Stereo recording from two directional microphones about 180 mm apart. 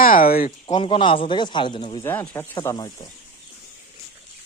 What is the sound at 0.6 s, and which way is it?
Speech, 25° left (ahead or behind).